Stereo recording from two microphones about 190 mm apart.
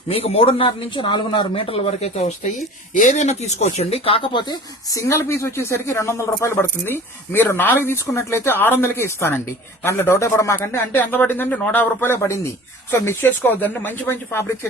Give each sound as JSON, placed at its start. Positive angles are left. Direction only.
{"t": 0.1, "sound": "a man's voice", "side_deg": 30}